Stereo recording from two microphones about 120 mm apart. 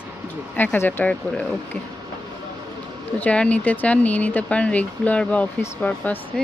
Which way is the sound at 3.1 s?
10° left (ahead or behind).